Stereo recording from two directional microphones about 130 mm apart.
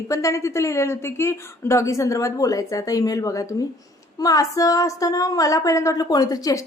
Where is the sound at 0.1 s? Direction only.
25° left (ahead or behind).